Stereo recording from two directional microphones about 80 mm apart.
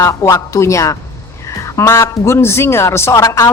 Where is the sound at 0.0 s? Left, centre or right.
Left.